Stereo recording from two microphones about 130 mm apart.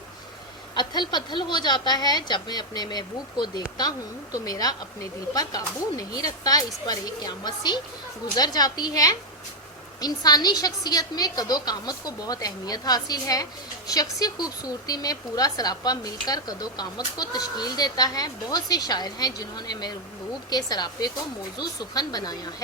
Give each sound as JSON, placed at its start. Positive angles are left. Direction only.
{"t": 0.8, "sound": "a woman's voice", "side_deg": 35}